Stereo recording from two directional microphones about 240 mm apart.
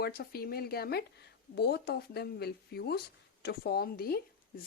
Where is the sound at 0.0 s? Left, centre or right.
Left.